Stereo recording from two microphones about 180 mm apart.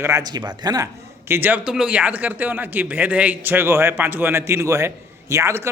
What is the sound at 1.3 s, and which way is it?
A man's voice, 10° right (ahead or behind).